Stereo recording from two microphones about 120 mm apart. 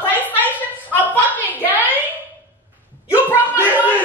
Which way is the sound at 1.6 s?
15° right (ahead or behind).